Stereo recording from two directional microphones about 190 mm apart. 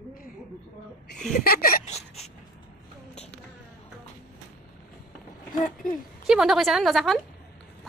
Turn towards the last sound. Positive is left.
turn(degrees=0)  # may be behind; listen again after turning